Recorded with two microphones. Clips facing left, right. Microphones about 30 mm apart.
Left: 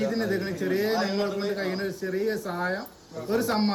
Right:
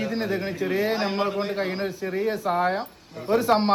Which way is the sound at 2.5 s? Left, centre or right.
Right.